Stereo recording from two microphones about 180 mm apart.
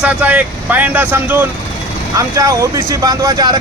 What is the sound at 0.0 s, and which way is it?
A man's voice, 10° right (ahead or behind).